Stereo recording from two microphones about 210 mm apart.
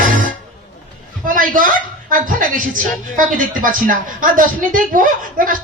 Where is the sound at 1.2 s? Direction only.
40° right (ahead or behind).